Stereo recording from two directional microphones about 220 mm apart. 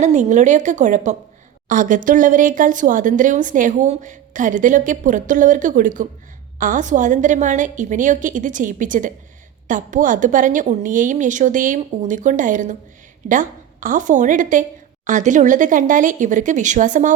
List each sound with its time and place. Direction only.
0.0 s speech: 35° right (ahead or behind)